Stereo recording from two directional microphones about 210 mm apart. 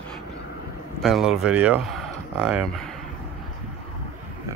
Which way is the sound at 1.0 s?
Centre (ahead or behind).